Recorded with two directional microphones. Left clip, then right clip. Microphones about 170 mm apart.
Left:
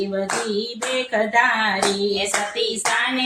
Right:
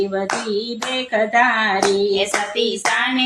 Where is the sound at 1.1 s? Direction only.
40° right (ahead or behind).